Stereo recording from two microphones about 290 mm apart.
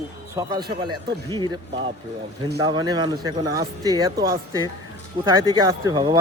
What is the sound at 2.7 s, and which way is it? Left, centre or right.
Speech, centre.